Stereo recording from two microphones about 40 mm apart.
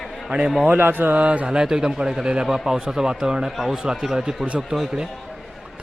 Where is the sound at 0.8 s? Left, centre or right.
Right.